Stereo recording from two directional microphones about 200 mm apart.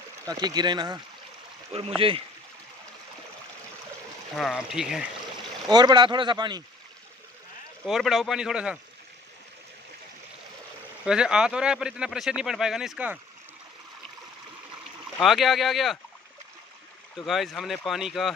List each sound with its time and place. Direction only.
0.2 s speech: 20° right (ahead or behind)
4.4 s speech: centre (ahead or behind)
5.7 s speech: 20° right (ahead or behind)
7.8 s speech: centre (ahead or behind)
11.1 s speech: 5° right (ahead or behind)
15.2 s speech: centre (ahead or behind)
17.3 s speech: centre (ahead or behind)